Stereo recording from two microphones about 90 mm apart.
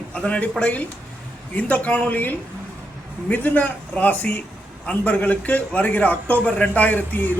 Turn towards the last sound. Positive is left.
turn(degrees=20)  # may be behind; listen again after turning